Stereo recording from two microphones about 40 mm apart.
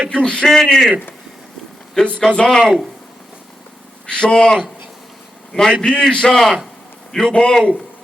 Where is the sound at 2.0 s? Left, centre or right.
Left.